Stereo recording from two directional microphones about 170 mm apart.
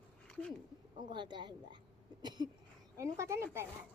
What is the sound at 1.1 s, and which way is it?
Speech, 25° right (ahead or behind).